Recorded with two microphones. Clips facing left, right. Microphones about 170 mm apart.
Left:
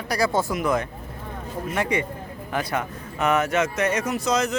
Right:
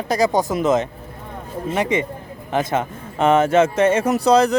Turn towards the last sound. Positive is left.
turn(degrees=-35)  # may be behind; listen again after turning